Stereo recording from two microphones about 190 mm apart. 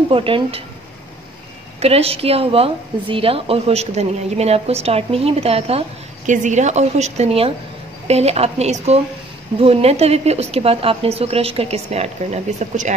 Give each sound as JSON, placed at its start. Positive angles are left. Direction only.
{"t": 0.1, "sound": "speech", "side_deg": -30}
{"t": 1.8, "sound": "a woman's voice", "side_deg": -30}